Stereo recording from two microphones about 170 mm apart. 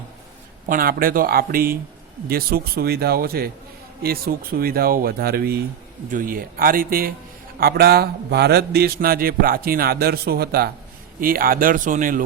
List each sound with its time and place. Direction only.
0.7 s speech: 60° right (ahead or behind)
6.1 s speech: 55° right (ahead or behind)
11.2 s speech: 55° right (ahead or behind)